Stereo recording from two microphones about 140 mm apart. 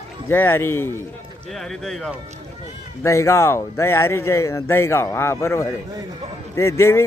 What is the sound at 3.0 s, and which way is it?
Speech, 20° left (ahead or behind).